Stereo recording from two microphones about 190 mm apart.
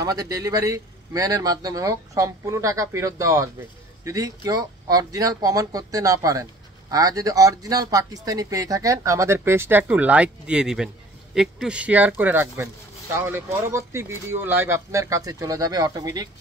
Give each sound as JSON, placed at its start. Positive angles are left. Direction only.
{"t": 0.0, "sound": "speech", "side_deg": -20}